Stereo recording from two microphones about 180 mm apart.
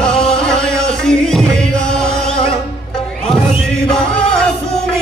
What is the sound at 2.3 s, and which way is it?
Music, 30° left (ahead or behind).